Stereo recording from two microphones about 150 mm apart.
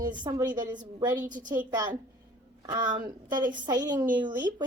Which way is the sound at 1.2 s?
60° right (ahead or behind).